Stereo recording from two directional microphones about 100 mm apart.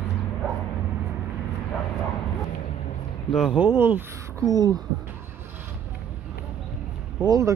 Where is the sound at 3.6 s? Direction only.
20° right (ahead or behind).